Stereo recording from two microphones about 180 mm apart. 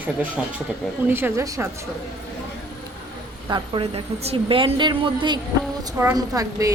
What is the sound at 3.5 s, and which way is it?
A woman's voice, 30° right (ahead or behind).